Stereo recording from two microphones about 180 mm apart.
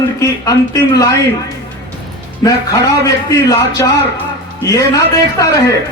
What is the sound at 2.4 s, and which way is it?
A man's voice, 20° left (ahead or behind).